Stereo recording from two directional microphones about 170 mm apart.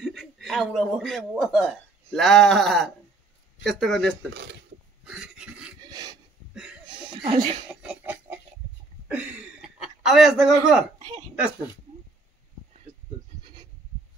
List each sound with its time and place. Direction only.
0.0 s speech: 5° left (ahead or behind)
4.3 s speech: 90° right
5.0 s a sound: 5° right (ahead or behind)
5.8 s filing: 25° right (ahead or behind)
6.5 s chuckle: 5° right (ahead or behind)
6.9 s chuckle: 25° right (ahead or behind)
7.8 s a sound: 10° right (ahead or behind)